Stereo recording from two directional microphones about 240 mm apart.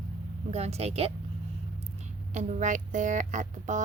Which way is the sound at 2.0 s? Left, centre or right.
Right.